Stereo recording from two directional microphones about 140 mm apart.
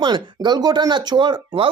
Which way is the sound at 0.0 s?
30° right (ahead or behind).